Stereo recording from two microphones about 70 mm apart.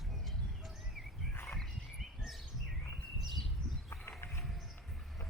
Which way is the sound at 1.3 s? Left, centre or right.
Left.